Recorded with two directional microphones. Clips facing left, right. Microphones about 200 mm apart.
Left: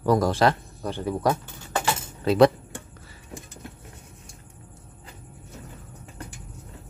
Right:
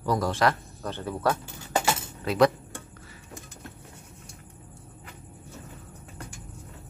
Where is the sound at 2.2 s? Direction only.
30° left (ahead or behind).